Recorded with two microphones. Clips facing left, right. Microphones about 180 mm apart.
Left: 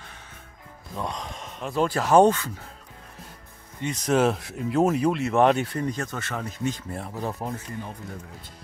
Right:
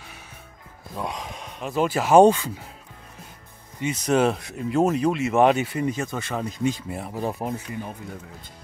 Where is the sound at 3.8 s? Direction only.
Centre (ahead or behind).